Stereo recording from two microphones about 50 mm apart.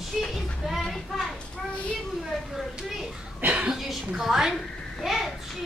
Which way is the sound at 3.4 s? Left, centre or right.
Right.